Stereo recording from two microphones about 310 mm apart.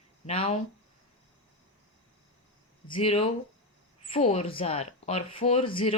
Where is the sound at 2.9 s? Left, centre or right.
Centre.